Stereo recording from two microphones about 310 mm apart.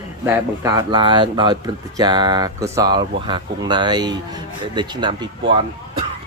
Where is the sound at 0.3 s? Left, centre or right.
Centre.